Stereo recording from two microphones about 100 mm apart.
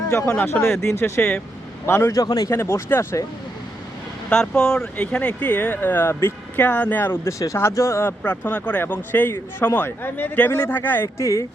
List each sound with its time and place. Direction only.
0.1 s a man's voice: 25° left (ahead or behind)
2.5 s speech: 25° left (ahead or behind)
4.3 s speech: 5° left (ahead or behind); by 8.1 s 25° left (ahead or behind)
8.2 s speech: 15° left (ahead or behind)